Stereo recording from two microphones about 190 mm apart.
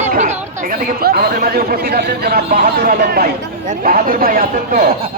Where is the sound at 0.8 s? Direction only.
50° right (ahead or behind).